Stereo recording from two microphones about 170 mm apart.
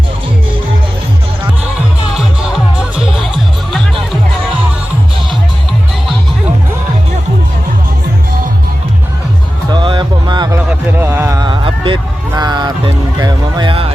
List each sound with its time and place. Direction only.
3.2 s music: centre (ahead or behind)
9.7 s music: 30° right (ahead or behind)
10.9 s a sound: 10° right (ahead or behind); by 11.9 s 30° right (ahead or behind)
12.3 s music: 25° right (ahead or behind)